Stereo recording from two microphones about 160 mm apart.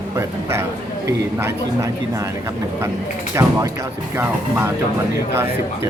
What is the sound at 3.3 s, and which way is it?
Speech, 20° right (ahead or behind).